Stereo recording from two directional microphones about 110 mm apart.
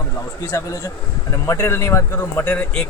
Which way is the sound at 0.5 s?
30° left (ahead or behind).